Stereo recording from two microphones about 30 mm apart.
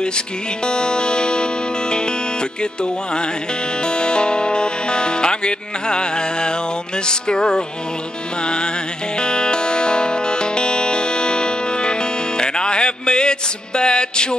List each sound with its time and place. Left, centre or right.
0.7 s music: left
3.8 s speech: left
9.2 s music: left